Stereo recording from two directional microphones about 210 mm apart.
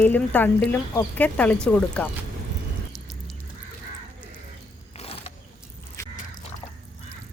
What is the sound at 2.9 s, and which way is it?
Music, centre (ahead or behind).